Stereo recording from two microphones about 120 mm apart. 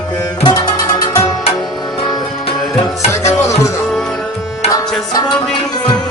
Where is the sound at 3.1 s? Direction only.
25° left (ahead or behind).